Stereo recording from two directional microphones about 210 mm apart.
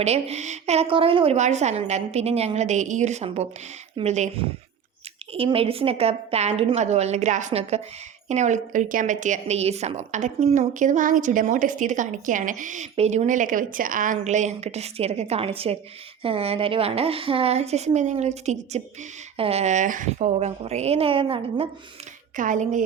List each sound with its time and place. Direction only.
0.0 s a woman's voice: 30° right (ahead or behind)
22.4 s a woman's voice: 35° right (ahead or behind)